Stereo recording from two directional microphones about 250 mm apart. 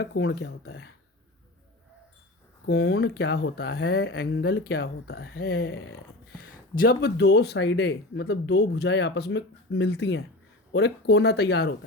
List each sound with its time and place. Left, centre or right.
0.0 s speech: left
2.9 s speech: left
6.4 s speech: left